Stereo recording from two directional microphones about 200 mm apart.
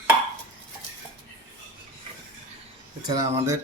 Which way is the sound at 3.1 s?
15° right (ahead or behind).